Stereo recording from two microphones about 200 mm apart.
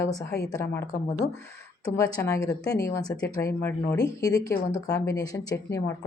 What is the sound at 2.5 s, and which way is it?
Speech, 15° left (ahead or behind).